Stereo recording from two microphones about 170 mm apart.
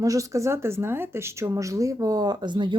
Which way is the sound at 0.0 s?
20° right (ahead or behind).